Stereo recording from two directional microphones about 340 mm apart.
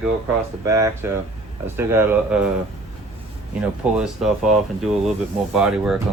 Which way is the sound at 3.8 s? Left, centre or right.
Centre.